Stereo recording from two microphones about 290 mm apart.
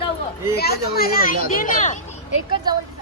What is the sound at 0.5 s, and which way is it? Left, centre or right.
A man's voice, left.